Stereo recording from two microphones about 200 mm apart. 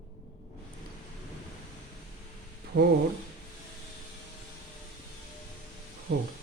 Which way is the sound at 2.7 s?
90° right.